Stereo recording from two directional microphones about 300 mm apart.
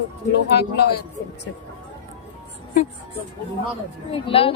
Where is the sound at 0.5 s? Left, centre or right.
Left.